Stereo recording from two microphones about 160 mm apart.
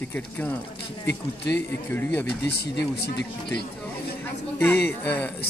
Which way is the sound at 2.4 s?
90° left.